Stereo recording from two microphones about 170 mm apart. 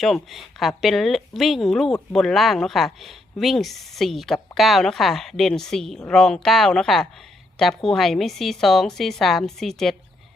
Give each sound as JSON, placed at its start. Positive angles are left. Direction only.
{"t": 0.0, "sound": "speech", "side_deg": 0}